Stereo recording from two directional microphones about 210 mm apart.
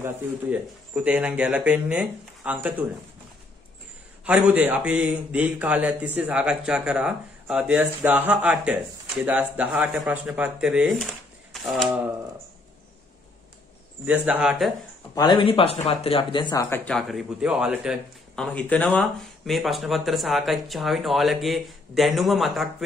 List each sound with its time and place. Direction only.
0.0 s speech: 5° right (ahead or behind)
4.2 s speech: 5° right (ahead or behind)
14.0 s speech: 5° right (ahead or behind)
15.1 s speech: 20° left (ahead or behind); by 22.8 s centre (ahead or behind)